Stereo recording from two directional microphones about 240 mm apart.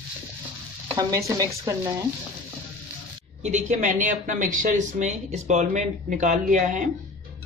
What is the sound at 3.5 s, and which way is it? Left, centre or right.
Speech, right.